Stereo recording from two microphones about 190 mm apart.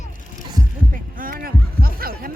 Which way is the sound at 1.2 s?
50° right (ahead or behind).